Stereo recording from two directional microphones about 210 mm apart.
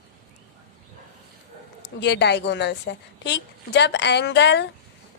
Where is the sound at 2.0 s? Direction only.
55° left (ahead or behind).